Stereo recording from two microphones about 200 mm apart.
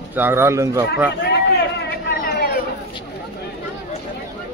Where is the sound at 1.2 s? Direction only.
55° left (ahead or behind).